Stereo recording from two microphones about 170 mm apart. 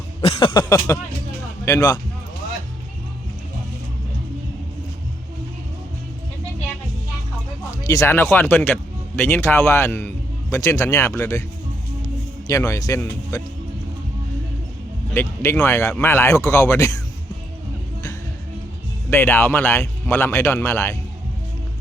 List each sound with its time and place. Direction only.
0.2 s a sound: 30° left (ahead or behind)
7.9 s speech: 15° left (ahead or behind)
12.5 s speech: 20° left (ahead or behind)
15.1 s speech: 15° left (ahead or behind)
19.1 s speech: 15° left (ahead or behind)